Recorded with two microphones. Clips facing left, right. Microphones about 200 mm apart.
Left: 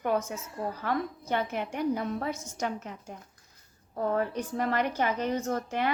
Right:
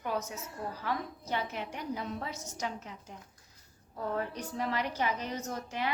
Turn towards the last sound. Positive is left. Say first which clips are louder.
# left 6 dB
turn(degrees=55)  # may be behind; listen again after turning